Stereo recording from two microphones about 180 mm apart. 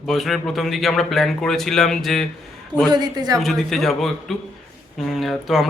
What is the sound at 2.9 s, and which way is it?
Speech, 20° right (ahead or behind).